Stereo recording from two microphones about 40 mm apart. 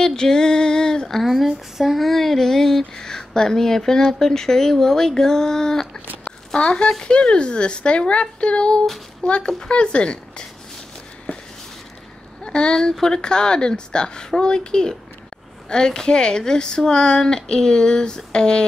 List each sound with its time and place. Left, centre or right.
0.0 s female singing: centre
1.1 s speech: centre; by 10.4 s left
12.4 s speech: left